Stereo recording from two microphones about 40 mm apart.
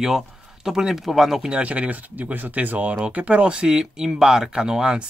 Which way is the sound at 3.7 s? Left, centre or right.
Centre.